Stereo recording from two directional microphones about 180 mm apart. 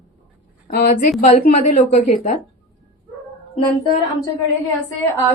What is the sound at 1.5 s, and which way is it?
Speech, 40° left (ahead or behind).